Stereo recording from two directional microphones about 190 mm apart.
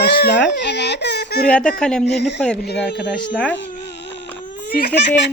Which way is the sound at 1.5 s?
5° left (ahead or behind).